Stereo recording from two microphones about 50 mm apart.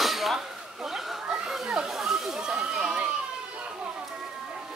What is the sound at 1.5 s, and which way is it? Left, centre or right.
Children playing, centre.